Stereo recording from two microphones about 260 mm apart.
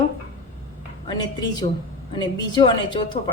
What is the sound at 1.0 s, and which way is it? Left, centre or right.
A woman's voice, centre.